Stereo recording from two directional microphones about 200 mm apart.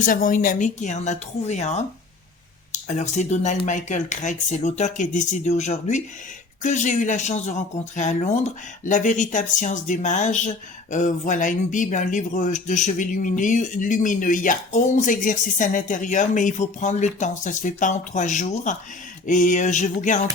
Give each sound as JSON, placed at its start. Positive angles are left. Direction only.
{"t": 0.0, "sound": "speech", "side_deg": 40}
{"t": 2.8, "sound": "speech", "side_deg": 35}